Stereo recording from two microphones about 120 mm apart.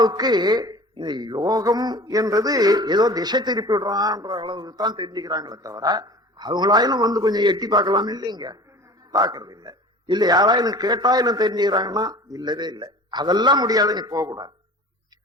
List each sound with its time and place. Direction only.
0.0 s a man's voice: 35° right (ahead or behind)